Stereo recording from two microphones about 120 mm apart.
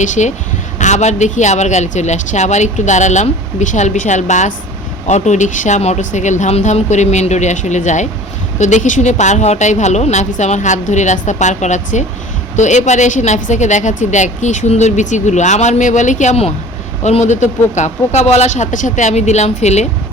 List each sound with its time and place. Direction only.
0.0 s a woman's voice: 85° left
5.0 s a woman's voice: 75° left (ahead or behind)